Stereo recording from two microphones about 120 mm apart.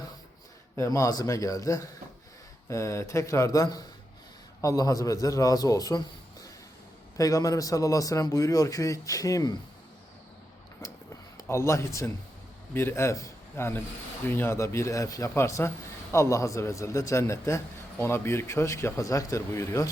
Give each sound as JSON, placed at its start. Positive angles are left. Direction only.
{"t": 0.8, "sound": "a man's voice", "side_deg": 25}
{"t": 7.2, "sound": "a man's voice", "side_deg": 30}
{"t": 10.8, "sound": "a sound", "side_deg": 25}
{"t": 12.7, "sound": "a man's voice", "side_deg": 20}